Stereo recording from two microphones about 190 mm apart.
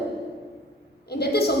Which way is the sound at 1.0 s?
55° left (ahead or behind).